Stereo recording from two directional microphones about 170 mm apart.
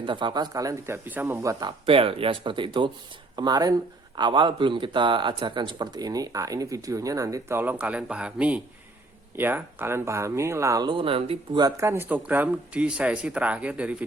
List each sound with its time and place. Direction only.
0.0 s speech: 30° right (ahead or behind)
1.9 s speech: 30° right (ahead or behind); by 13.9 s 5° right (ahead or behind)